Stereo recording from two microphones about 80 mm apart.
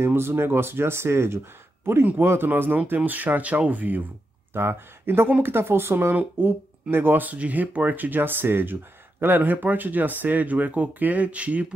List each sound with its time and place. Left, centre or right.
0.0 s speech: right